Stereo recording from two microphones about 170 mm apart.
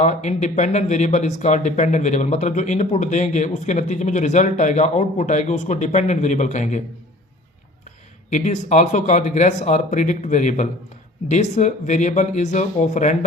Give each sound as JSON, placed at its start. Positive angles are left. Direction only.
{"t": 0.0, "sound": "speech", "side_deg": 45}
{"t": 8.3, "sound": "speech", "side_deg": 45}